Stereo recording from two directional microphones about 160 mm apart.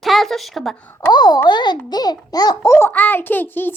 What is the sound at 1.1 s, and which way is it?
A child's voice, 25° left (ahead or behind).